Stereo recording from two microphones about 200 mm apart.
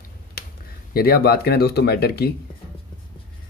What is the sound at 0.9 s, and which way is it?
Speech, 50° left (ahead or behind).